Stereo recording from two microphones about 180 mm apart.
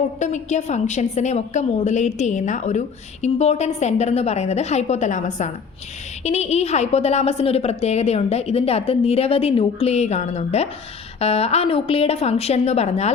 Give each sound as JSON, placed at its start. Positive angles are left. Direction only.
{"t": 0.2, "sound": "a woman's voice", "side_deg": 40}